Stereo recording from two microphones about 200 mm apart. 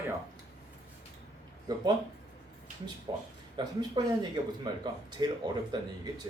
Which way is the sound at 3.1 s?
25° right (ahead or behind).